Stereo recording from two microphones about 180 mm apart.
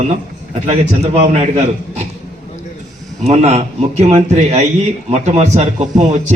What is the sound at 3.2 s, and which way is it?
A man's voice, 35° right (ahead or behind).